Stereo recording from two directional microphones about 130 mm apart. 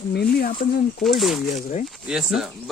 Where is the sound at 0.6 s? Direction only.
90° left.